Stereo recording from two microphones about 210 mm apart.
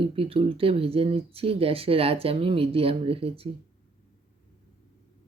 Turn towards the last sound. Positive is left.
turn(degrees=-25)  # may be behind; listen again after turning